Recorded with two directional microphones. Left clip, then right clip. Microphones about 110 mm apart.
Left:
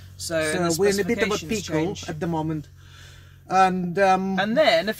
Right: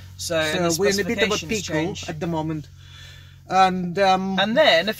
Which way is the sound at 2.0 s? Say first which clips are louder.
Right 1 dB; 30° left (ahead or behind).